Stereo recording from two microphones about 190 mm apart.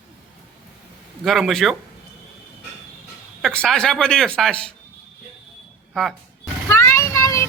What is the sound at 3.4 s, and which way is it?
Speech, 5° left (ahead or behind).